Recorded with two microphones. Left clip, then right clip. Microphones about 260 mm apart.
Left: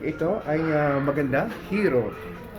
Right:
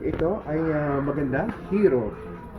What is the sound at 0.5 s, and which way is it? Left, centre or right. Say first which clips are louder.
Speech: left 2 dB; centre.